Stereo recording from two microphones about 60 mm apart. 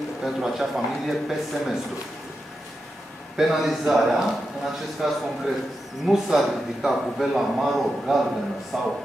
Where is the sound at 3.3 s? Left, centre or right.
Centre.